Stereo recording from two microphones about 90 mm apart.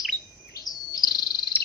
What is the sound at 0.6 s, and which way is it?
Bird, 45° left (ahead or behind).